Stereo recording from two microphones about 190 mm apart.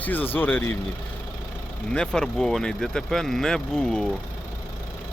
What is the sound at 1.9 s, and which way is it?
Speech, 5° left (ahead or behind).